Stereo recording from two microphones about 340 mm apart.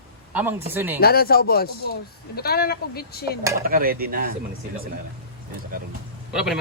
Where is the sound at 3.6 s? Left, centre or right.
Right.